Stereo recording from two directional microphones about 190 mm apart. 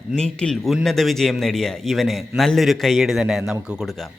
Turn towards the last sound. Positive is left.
turn(degrees=-5)  # may be behind; listen again after turning